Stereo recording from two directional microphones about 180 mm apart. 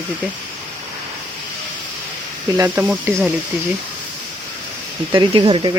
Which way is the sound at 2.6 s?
10° right (ahead or behind).